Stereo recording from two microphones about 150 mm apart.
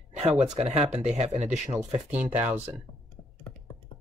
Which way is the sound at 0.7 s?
50° right (ahead or behind).